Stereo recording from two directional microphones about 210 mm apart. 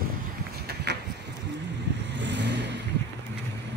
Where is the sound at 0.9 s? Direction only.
55° right (ahead or behind).